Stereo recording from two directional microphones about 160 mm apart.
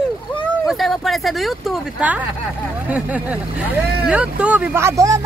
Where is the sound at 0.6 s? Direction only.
Centre (ahead or behind).